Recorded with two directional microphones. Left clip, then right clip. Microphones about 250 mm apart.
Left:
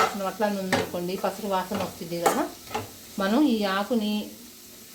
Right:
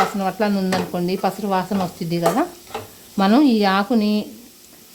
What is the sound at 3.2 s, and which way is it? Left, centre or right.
Speech, right.